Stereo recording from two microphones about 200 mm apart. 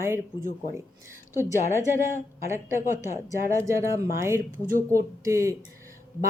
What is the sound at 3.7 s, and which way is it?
Speech, 15° right (ahead or behind).